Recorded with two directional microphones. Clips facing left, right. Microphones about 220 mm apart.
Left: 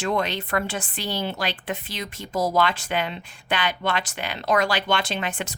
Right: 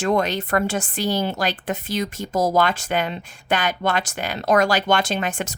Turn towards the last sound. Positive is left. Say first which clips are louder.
# right 4 dB
turn(degrees=-45)  # may be behind; listen again after turning